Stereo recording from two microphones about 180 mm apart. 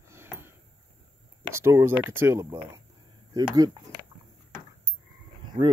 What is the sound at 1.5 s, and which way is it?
Speech, 15° right (ahead or behind).